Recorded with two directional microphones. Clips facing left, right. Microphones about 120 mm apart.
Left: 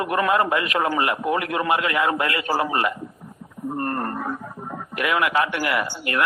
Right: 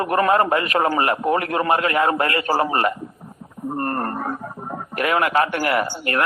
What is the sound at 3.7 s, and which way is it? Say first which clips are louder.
Radio: right 2 dB; 45° right (ahead or behind).